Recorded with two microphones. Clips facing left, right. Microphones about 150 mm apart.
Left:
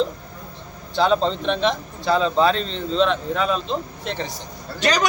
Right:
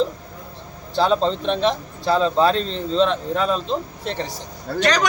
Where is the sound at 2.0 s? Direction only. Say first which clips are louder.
Right 1 dB; centre (ahead or behind).